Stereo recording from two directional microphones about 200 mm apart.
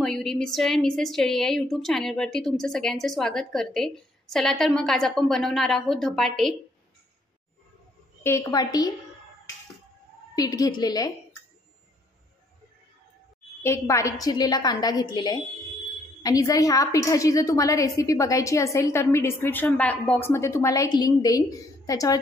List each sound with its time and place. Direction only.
0.0 s a woman's voice: centre (ahead or behind)
8.2 s a woman's voice: 10° left (ahead or behind)
10.3 s a woman's voice: 20° left (ahead or behind)
13.6 s a woman's voice: 15° left (ahead or behind)